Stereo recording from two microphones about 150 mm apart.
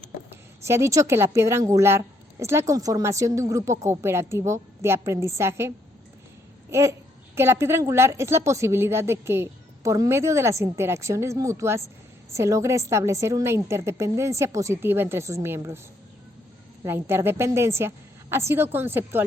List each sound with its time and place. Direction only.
0.6 s a woman's voice: 20° right (ahead or behind)
16.8 s a woman's voice: 15° right (ahead or behind)